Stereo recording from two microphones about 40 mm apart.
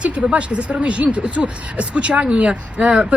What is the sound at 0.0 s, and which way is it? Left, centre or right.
Speech, right.